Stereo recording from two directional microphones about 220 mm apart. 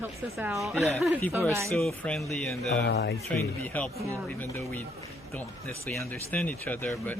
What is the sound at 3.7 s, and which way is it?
Speech, 5° left (ahead or behind).